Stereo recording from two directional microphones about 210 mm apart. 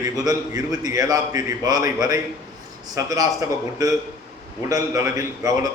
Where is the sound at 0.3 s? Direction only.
15° right (ahead or behind).